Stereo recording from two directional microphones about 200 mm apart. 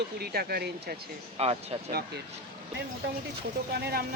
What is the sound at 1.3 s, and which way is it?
Speech, 30° right (ahead or behind).